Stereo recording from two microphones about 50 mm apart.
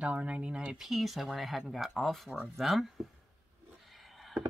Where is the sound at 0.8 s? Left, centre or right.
Centre.